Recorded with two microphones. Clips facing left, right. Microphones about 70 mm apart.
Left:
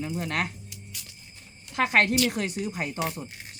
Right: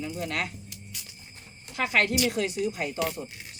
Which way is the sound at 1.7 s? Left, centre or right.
Left.